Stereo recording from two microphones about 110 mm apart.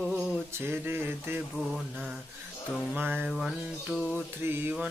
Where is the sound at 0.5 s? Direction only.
20° right (ahead or behind).